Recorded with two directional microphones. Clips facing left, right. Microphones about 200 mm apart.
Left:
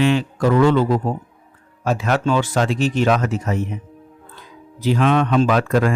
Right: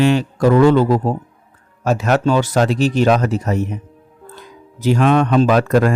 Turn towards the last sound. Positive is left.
turn(degrees=-40)  # may be behind; listen again after turning